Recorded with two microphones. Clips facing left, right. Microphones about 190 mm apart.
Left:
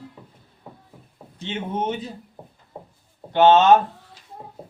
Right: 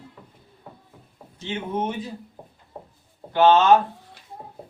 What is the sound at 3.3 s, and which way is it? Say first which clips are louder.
Speech: left 2 dB; 20° left (ahead or behind).